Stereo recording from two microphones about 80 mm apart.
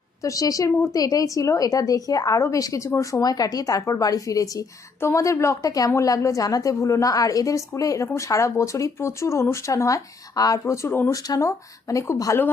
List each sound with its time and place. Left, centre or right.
0.2 s a woman's voice: left
4.9 s speech: left
5.6 s a woman's voice: left